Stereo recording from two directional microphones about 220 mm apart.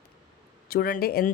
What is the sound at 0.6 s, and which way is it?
Speech, 40° left (ahead or behind).